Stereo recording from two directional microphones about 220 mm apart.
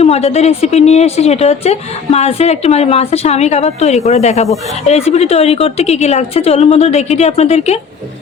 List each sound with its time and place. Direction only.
0.0 s a woman's voice: 30° left (ahead or behind)